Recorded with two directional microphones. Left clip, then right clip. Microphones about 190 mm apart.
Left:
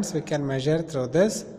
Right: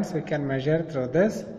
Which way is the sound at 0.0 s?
45° left (ahead or behind).